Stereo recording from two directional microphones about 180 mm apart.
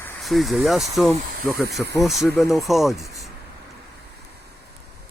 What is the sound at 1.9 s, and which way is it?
Speech, centre (ahead or behind).